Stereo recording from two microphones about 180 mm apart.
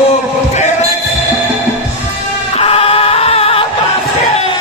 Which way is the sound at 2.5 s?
35° left (ahead or behind).